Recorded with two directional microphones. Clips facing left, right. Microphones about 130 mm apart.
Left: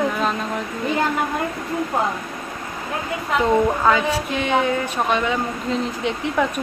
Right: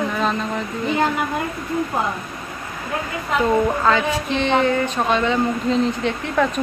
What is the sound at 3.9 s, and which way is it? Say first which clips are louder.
Speech: even; 10° left (ahead or behind).